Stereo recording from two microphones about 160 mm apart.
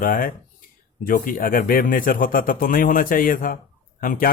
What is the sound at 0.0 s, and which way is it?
Speech, 60° left (ahead or behind).